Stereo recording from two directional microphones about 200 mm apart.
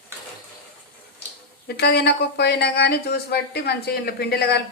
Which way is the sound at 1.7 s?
55° left (ahead or behind).